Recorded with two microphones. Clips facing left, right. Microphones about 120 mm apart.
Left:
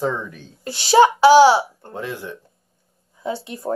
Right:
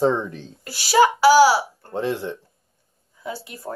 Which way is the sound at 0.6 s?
25° left (ahead or behind).